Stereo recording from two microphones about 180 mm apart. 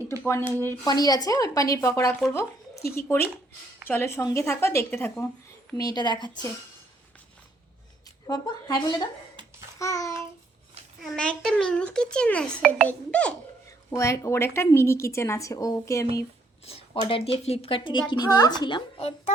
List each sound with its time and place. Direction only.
0.2 s a woman's voice: 15° left (ahead or behind)
2.3 s a sound: 15° left (ahead or behind)
2.9 s a woman's voice: 15° left (ahead or behind)
5.7 s speech: 20° left (ahead or behind)
8.3 s speech: 20° left (ahead or behind)
9.3 s babbling: 25° right (ahead or behind)
9.7 s a woman's voice: 15° left (ahead or behind)
11.0 s a child's voice: centre (ahead or behind); by 16.2 s 15° left (ahead or behind)
16.6 s speech: 35° left (ahead or behind)